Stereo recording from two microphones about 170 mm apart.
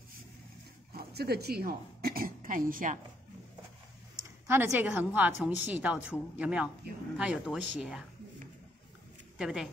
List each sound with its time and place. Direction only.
0.9 s a woman's voice: 65° right (ahead or behind)
4.2 s a woman's voice: 15° right (ahead or behind)
9.4 s speech: 5° right (ahead or behind)